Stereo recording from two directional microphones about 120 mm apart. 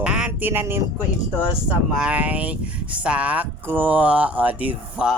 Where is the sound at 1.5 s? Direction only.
10° right (ahead or behind).